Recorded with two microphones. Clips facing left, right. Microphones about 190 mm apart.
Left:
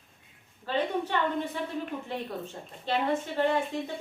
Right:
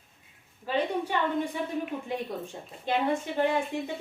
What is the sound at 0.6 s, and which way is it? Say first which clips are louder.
A woman's voice: right 1 dB; 10° right (ahead or behind).